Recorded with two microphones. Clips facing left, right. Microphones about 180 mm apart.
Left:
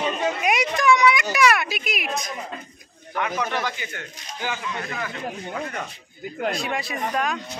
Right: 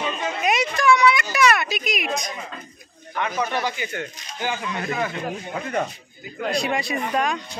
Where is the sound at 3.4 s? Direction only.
15° right (ahead or behind).